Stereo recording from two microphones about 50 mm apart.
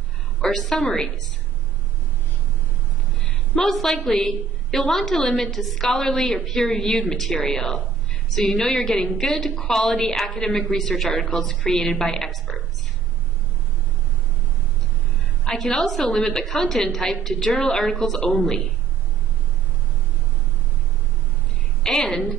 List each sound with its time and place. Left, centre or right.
0.5 s a woman's voice: centre
3.2 s a sound: left
3.6 s a woman's voice: centre
11.1 s a man's voice: left
11.3 s a woman's voice: centre
12.3 s a woman's voice: centre
15.5 s a woman's voice: centre
21.8 s a woman's voice: centre